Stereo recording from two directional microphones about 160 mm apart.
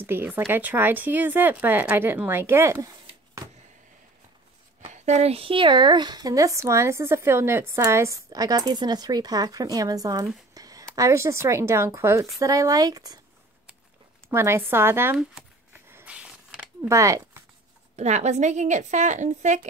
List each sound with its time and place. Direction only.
0.0 s speech: 15° right (ahead or behind)
4.8 s speech: 45° right (ahead or behind); by 10.3 s 20° right (ahead or behind)
10.5 s a sound: 20° right (ahead or behind)
11.0 s speech: 20° right (ahead or behind)
14.3 s speech: 15° right (ahead or behind)
15.3 s a sound: 10° right (ahead or behind)
16.8 s speech: 20° right (ahead or behind)
17.9 s a woman's voice: 45° right (ahead or behind)